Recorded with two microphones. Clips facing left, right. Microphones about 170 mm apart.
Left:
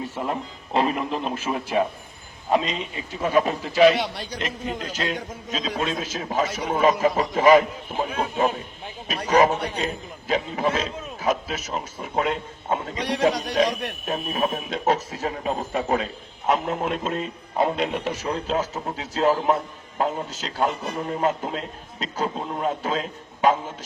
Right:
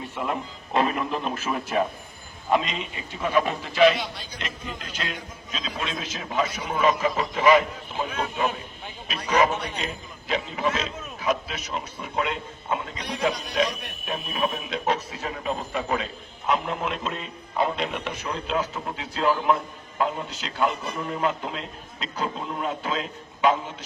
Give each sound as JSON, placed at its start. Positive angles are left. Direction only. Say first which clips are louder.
{"t": 0.3, "sound": "a man's voice", "louder": "left 1 dB", "side_deg": 30}
{"t": 3.9, "sound": "a man's voice", "louder": "left 6 dB", "side_deg": 70}
{"t": 4.4, "sound": "a man's voice", "louder": "left 7 dB", "side_deg": 40}
{"t": 14.1, "sound": "a man's voice", "louder": "left 2 dB", "side_deg": 40}